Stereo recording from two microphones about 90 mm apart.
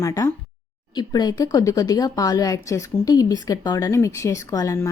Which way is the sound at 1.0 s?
50° left (ahead or behind).